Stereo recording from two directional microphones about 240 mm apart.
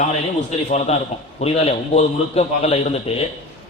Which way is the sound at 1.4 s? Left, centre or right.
Left.